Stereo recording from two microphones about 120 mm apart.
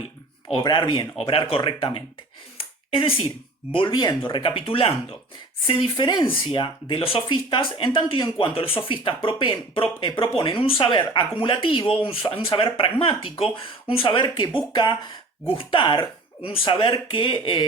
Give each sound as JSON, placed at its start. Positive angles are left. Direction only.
{"t": 0.5, "sound": "speech", "side_deg": 40}
{"t": 1.2, "sound": "speech", "side_deg": 50}
{"t": 15.5, "sound": "speech", "side_deg": 45}